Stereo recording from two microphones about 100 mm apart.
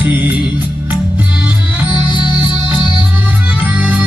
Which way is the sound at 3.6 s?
15° right (ahead or behind).